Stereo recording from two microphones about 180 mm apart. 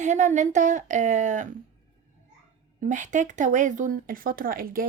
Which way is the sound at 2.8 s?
45° right (ahead or behind).